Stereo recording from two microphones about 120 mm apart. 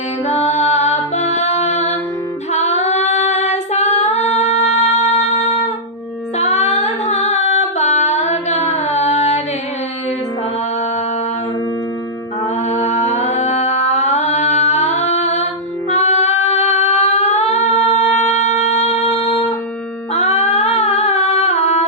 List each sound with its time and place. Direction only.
0.3 s music: 70° left (ahead or behind)
2.5 s female singing: 70° left (ahead or behind)
6.4 s music: 65° left (ahead or behind)
12.7 s singing: 75° left (ahead or behind)
18.2 s music: 70° left (ahead or behind)
20.1 s humming: 60° left (ahead or behind)